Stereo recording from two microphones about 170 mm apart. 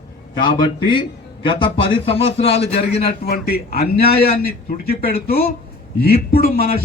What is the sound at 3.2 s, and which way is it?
A man's voice, 65° left (ahead or behind).